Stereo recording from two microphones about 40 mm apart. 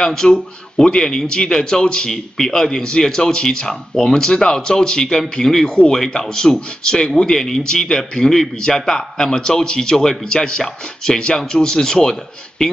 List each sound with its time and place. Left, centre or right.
0.0 s a man's voice: centre